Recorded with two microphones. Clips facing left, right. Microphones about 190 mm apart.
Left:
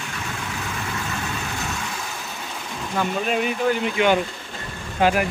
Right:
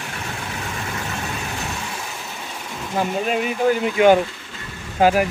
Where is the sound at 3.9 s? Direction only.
40° right (ahead or behind).